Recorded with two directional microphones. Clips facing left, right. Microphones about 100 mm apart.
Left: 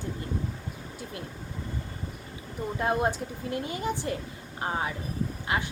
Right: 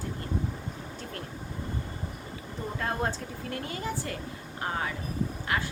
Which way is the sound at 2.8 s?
20° left (ahead or behind).